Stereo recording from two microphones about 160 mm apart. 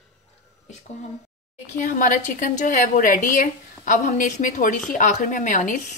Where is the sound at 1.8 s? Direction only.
55° left (ahead or behind).